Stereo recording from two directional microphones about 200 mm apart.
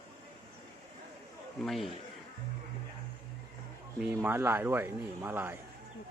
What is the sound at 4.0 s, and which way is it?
A man's voice, 10° right (ahead or behind).